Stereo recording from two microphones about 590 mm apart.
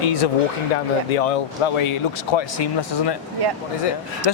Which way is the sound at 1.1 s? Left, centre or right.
Left.